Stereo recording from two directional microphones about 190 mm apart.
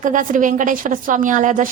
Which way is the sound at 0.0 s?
45° right (ahead or behind).